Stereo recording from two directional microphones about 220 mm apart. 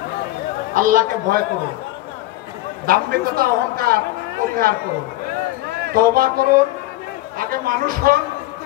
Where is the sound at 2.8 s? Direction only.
40° right (ahead or behind).